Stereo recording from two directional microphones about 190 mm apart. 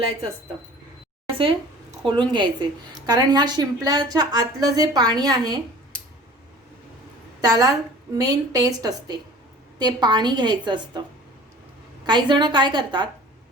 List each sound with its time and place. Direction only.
1.3 s a woman's voice: 30° right (ahead or behind)
7.4 s a woman's voice: 20° right (ahead or behind)
12.0 s a woman's voice: 25° right (ahead or behind)